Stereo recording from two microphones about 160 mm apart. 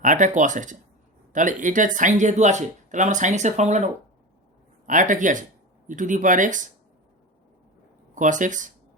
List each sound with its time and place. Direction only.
0.0 s speech: 50° right (ahead or behind)
4.9 s speech: 55° right (ahead or behind)
8.1 s speech: 55° right (ahead or behind)